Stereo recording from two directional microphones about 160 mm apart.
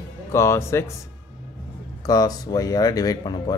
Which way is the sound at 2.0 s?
25° left (ahead or behind).